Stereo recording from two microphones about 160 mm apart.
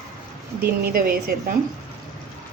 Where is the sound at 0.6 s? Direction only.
65° right (ahead or behind).